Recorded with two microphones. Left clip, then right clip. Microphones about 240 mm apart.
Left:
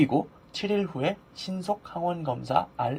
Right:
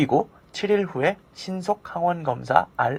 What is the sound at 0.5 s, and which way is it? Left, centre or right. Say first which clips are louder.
Speech: right 6 dB; centre.